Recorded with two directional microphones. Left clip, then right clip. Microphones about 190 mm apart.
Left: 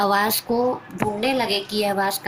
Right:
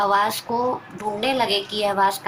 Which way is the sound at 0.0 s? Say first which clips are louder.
Right 1 dB; 55° left (ahead or behind).